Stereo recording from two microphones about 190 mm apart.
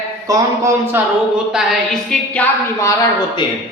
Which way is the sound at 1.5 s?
Centre (ahead or behind).